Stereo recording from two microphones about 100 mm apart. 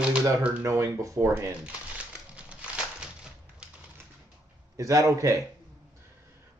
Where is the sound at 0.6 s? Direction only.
30° right (ahead or behind).